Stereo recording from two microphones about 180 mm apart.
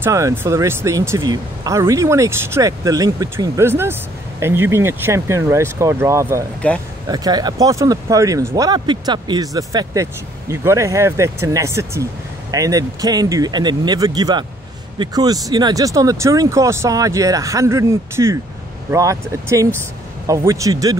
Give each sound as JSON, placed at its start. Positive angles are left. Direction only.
{"t": 0.0, "sound": "speech", "side_deg": -15}
{"t": 6.6, "sound": "speech", "side_deg": 10}
{"t": 7.1, "sound": "speech", "side_deg": -20}